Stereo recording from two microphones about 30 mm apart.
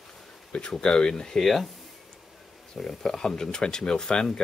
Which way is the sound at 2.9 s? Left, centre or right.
Centre.